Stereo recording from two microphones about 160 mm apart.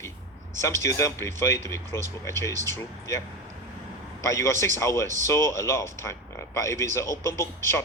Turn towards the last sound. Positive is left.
turn(degrees=15)  # may be behind; listen again after turning